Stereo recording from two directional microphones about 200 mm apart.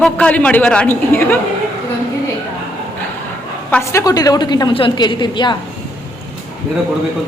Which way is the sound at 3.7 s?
15° left (ahead or behind).